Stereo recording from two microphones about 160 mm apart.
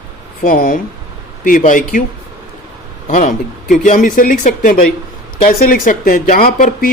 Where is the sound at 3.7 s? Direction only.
55° left (ahead or behind).